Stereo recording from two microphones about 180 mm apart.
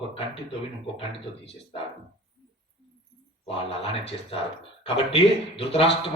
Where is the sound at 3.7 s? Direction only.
30° left (ahead or behind).